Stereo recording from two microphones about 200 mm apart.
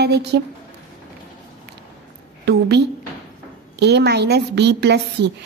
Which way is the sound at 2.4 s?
55° right (ahead or behind).